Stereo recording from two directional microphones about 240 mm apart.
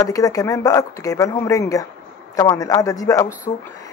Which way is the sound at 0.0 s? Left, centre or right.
Centre.